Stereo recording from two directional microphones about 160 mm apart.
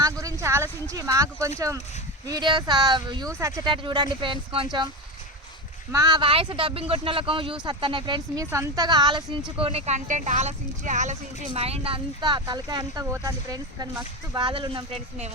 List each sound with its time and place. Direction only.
0.0 s a sound: 20° right (ahead or behind)
1.5 s speech: 20° right (ahead or behind)
5.9 s speech: 25° right (ahead or behind)
8.4 s speech: 15° right (ahead or behind); by 15.3 s 40° right (ahead or behind)